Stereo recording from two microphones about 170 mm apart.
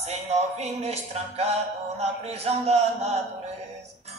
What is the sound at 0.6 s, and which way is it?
Music, 40° right (ahead or behind).